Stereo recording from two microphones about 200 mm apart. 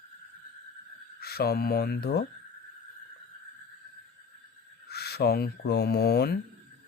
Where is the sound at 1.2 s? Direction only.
50° left (ahead or behind).